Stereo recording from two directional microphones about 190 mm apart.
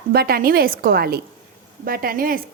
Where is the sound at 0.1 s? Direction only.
55° right (ahead or behind).